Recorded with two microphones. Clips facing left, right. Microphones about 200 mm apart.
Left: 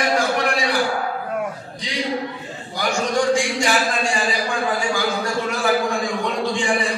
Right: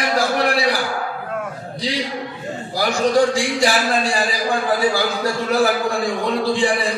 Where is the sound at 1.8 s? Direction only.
35° right (ahead or behind).